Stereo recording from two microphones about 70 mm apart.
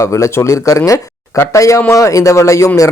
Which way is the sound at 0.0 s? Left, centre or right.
Left.